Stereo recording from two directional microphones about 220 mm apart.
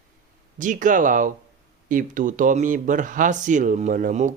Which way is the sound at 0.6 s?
35° right (ahead or behind).